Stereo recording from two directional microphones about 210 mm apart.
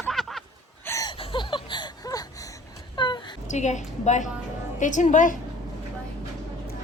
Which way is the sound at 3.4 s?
35° left (ahead or behind).